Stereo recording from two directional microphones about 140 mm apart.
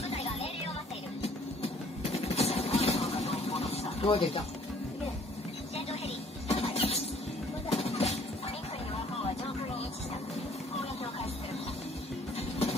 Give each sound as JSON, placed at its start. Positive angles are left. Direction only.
{"t": 0.1, "sound": "music", "side_deg": 45}
{"t": 2.1, "sound": "vehicle", "side_deg": 50}
{"t": 6.5, "sound": "a sound", "side_deg": 45}
{"t": 7.7, "sound": "music", "side_deg": 50}
{"t": 12.4, "sound": "music", "side_deg": 45}